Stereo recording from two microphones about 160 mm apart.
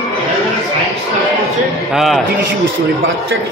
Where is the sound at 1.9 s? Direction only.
Centre (ahead or behind).